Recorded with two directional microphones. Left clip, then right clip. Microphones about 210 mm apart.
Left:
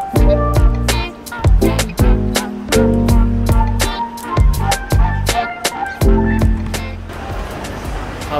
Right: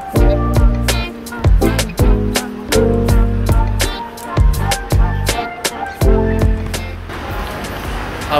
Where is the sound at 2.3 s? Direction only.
20° right (ahead or behind).